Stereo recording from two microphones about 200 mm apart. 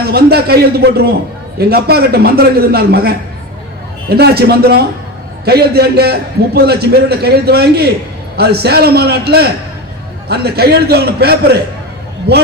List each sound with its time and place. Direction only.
0.0 s a man's voice: 55° right (ahead or behind)